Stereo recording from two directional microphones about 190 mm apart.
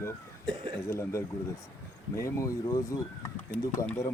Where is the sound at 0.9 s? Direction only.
15° left (ahead or behind).